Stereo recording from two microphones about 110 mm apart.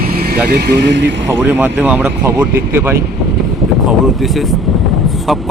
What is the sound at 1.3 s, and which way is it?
Speech, 20° right (ahead or behind).